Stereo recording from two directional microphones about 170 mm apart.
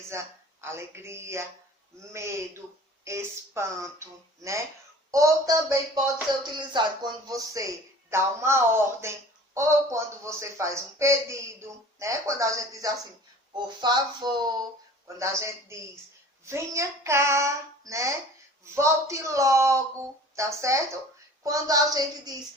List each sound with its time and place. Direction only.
0.1 s speech: 15° right (ahead or behind)
5.1 s music: 20° right (ahead or behind)
8.1 s speech: 15° right (ahead or behind)
11.9 s music: 20° right (ahead or behind)
15.0 s speech: 15° right (ahead or behind)
21.4 s music: 20° right (ahead or behind)